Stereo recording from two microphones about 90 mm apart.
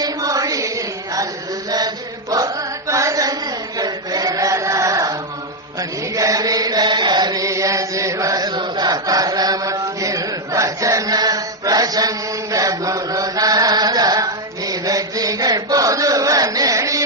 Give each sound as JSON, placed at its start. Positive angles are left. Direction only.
{"t": 0.0, "sound": "chant", "side_deg": -40}
{"t": 2.3, "sound": "chant", "side_deg": -40}
{"t": 6.1, "sound": "chant", "side_deg": -40}